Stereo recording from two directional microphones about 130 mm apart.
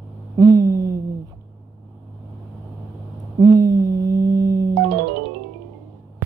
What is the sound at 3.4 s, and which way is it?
Mantra, 30° right (ahead or behind).